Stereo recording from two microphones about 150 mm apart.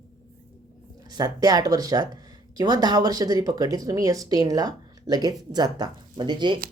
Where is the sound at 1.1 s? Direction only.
25° right (ahead or behind).